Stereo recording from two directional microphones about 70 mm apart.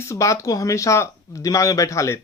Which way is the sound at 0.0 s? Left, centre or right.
Left.